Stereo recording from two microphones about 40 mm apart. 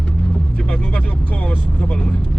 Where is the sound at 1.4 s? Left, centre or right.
Left.